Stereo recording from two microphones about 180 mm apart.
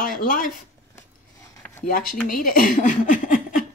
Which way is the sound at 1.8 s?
55° left (ahead or behind).